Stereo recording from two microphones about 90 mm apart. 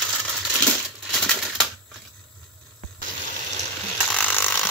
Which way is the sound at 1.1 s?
10° left (ahead or behind).